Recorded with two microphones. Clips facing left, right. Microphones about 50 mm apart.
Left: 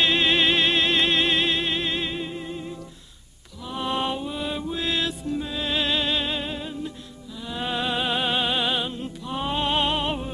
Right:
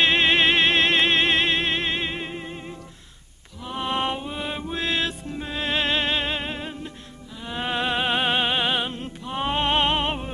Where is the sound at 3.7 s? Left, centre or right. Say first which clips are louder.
Right 1 dB; right.